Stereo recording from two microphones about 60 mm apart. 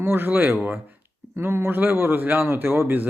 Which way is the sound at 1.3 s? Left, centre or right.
Right.